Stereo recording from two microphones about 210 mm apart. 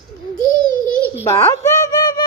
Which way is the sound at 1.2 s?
15° left (ahead or behind).